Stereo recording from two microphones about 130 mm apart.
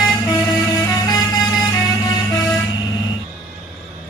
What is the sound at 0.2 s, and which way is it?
Music, 25° left (ahead or behind).